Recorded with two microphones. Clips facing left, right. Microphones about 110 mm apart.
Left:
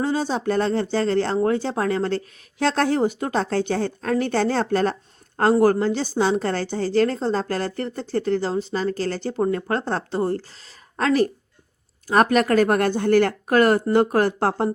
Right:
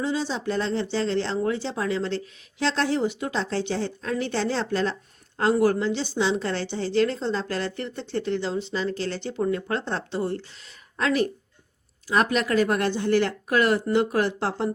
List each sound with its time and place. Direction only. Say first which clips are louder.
0.0 s a woman's voice: left 4 dB; 50° left (ahead or behind)